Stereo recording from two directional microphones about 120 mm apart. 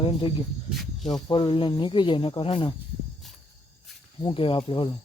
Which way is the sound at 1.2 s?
35° left (ahead or behind).